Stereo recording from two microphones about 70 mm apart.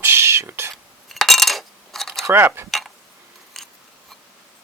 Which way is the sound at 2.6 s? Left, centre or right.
Centre.